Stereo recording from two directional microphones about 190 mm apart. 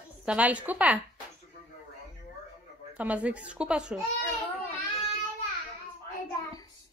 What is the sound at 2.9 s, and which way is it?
Speech, 5° right (ahead or behind).